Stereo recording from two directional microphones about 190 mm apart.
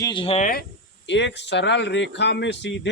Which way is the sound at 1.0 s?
70° left (ahead or behind).